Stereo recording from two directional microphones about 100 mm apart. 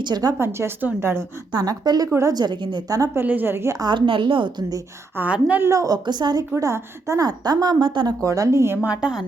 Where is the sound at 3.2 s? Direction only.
20° right (ahead or behind).